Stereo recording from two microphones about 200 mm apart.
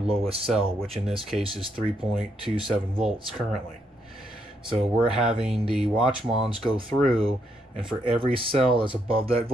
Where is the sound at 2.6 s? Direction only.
Centre (ahead or behind).